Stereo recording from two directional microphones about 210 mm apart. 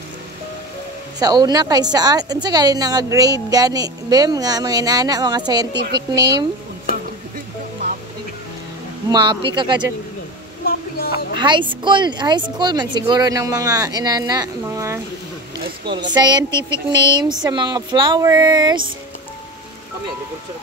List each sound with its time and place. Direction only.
1.2 s a woman's voice: 20° right (ahead or behind)
9.1 s speech: 20° right (ahead or behind)
10.6 s a sound: 45° left (ahead or behind)
11.3 s speech: 20° right (ahead or behind)
16.4 s speech: 15° left (ahead or behind)
16.9 s speech: 20° right (ahead or behind)